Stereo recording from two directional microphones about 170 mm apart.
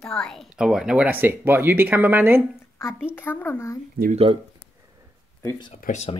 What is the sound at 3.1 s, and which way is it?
Speech, 15° left (ahead or behind).